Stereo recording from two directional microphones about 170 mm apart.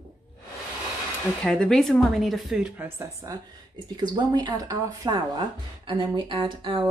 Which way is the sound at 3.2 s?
20° right (ahead or behind).